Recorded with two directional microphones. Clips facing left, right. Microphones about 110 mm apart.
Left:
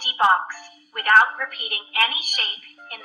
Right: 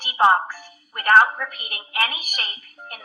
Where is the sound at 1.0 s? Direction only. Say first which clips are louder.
Right 1 dB; 15° right (ahead or behind).